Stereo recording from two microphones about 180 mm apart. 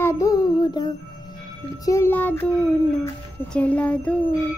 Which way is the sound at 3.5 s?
10° left (ahead or behind).